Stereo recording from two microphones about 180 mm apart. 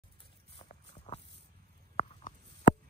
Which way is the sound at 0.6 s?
35° left (ahead or behind).